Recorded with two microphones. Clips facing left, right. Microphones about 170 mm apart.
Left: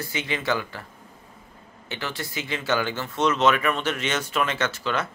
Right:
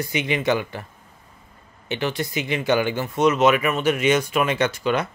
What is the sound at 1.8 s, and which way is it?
Speech, 20° right (ahead or behind).